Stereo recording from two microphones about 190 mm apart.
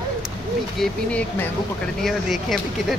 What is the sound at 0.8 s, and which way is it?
Speech, 5° left (ahead or behind).